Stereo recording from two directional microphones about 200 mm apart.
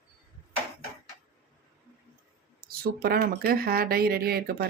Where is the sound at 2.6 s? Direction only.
50° right (ahead or behind).